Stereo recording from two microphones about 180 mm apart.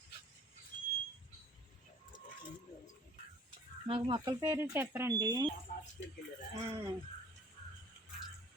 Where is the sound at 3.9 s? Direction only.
30° right (ahead or behind).